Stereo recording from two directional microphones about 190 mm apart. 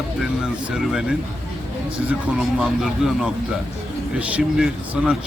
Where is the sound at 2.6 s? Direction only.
5° right (ahead or behind).